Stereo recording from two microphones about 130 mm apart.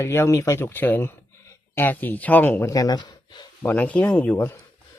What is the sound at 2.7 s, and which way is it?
Speech, 30° left (ahead or behind).